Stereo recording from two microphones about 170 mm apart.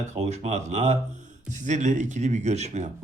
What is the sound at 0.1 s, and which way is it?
Speech, 40° right (ahead or behind).